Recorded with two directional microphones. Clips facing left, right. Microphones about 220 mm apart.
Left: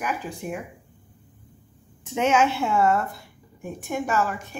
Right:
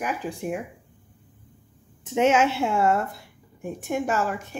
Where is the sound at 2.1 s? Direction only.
25° right (ahead or behind).